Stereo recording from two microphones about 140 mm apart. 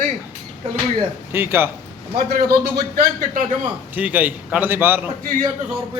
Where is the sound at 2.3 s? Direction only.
90° right.